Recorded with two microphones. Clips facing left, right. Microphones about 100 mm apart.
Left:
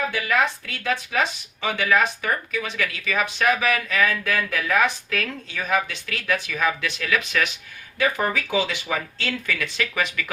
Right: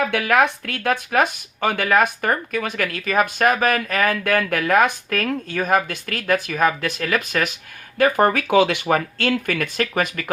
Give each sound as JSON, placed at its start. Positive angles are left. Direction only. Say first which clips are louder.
{"t": 0.1, "sound": "speech", "louder": "right 5 dB", "side_deg": -70}